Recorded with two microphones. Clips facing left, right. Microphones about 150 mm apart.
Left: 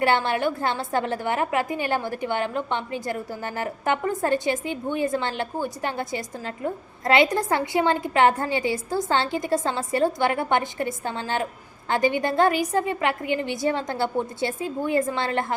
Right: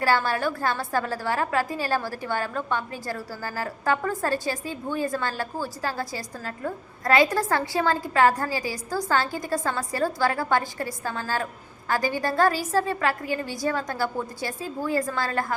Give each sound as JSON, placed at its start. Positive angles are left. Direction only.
{"t": 0.0, "sound": "a woman's voice", "side_deg": 25}